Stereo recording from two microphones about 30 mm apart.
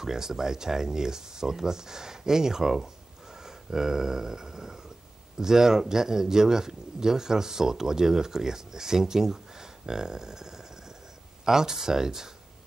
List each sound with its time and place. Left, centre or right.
0.0 s a man's voice: centre
3.4 s dog: centre
5.4 s a man's voice: centre